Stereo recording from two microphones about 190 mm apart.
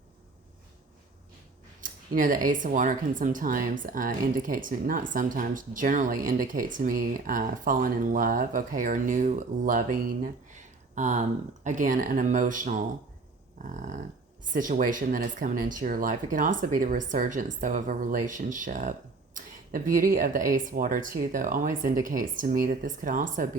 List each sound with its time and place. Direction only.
1.8 s speech: 45° right (ahead or behind)
13.6 s a sound: 40° right (ahead or behind)
14.5 s speech: 45° right (ahead or behind)